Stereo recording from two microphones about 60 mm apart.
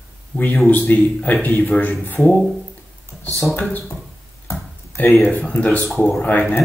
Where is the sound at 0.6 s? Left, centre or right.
Left.